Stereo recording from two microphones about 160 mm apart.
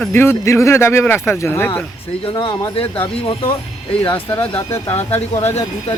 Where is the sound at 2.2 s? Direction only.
30° left (ahead or behind).